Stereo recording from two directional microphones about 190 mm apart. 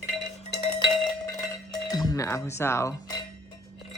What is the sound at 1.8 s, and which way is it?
Speech, 20° left (ahead or behind).